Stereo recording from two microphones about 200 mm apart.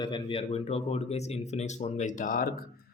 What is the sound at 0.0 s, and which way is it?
Speech, 25° left (ahead or behind).